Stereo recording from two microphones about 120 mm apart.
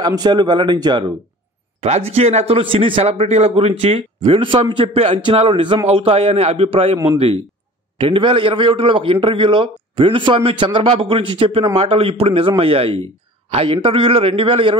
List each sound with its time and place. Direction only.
0.0 s a man's voice: 35° right (ahead or behind)
1.8 s a man's voice: 60° right (ahead or behind)
8.0 s a man's voice: 45° right (ahead or behind)